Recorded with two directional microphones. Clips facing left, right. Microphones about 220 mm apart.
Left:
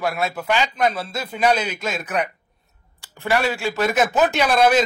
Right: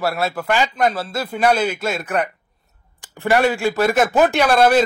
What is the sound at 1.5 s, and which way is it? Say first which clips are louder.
Speech: right 5 dB; 5° right (ahead or behind).